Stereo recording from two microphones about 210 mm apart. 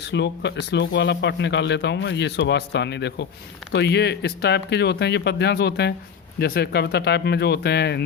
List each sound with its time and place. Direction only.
0.1 s speech: 55° left (ahead or behind)